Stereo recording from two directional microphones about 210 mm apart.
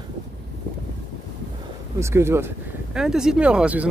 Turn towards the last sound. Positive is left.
turn(degrees=-5)  # may be behind; listen again after turning